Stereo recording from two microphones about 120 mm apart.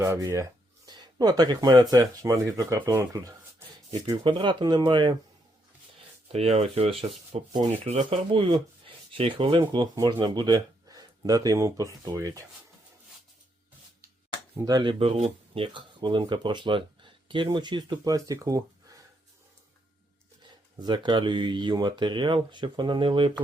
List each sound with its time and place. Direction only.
0.0 s speech: 25° right (ahead or behind)
0.9 s speech: 35° right (ahead or behind)
6.3 s speech: 60° right (ahead or behind)
8.3 s speech: 45° right (ahead or behind); by 12.5 s 30° right (ahead or behind)
14.6 s speech: 35° right (ahead or behind)
14.9 s speech: 55° right (ahead or behind); by 18.6 s 30° right (ahead or behind)
20.7 s speech: 40° right (ahead or behind)